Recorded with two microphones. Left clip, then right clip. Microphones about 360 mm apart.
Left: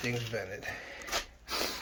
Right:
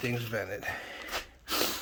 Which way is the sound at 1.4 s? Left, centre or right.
Centre.